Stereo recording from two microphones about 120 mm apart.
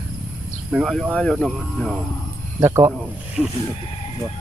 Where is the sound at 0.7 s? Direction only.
Centre (ahead or behind).